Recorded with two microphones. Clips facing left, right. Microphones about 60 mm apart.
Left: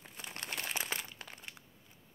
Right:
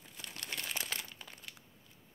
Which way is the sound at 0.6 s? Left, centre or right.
Centre.